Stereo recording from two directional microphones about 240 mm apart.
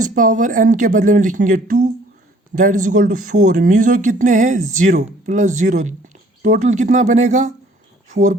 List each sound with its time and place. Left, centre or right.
0.0 s speech: right